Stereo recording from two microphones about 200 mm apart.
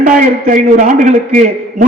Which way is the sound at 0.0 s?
40° right (ahead or behind).